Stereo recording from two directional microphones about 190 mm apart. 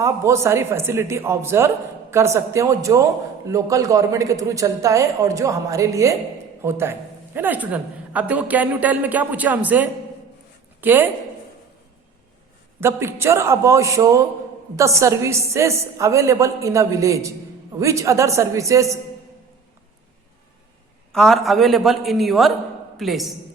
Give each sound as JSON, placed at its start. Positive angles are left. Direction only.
{"t": 0.0, "sound": "a man's voice", "side_deg": -15}
{"t": 12.8, "sound": "a man's voice", "side_deg": -10}
{"t": 21.1, "sound": "a man's voice", "side_deg": 0}